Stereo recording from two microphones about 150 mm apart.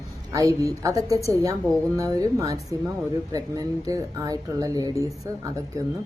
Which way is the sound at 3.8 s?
25° right (ahead or behind).